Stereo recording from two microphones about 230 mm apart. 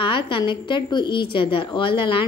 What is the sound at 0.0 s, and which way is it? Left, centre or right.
A woman's voice, left.